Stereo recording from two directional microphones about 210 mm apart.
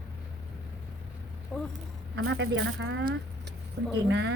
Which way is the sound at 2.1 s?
75° right (ahead or behind).